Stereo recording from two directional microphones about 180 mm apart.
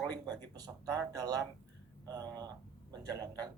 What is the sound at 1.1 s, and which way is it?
A man's voice, 20° right (ahead or behind).